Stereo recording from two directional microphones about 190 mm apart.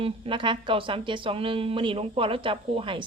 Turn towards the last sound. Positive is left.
turn(degrees=-30)  # may be behind; listen again after turning